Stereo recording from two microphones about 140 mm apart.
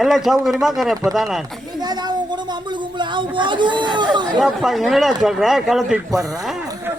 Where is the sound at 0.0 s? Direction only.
Centre (ahead or behind).